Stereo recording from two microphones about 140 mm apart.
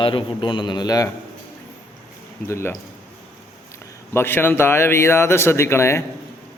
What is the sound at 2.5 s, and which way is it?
Speech, 20° left (ahead or behind).